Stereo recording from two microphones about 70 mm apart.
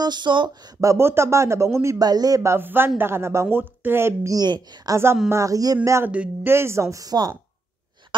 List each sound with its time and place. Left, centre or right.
0.0 s speech: right
0.7 s a woman's voice: right
2.0 s a woman's voice: right
2.4 s a woman's voice: right
4.3 s a woman's voice: right
4.9 s a woman's voice: right
5.3 s speech: right
6.0 s speech: centre
6.4 s speech: right
8.1 s speech: right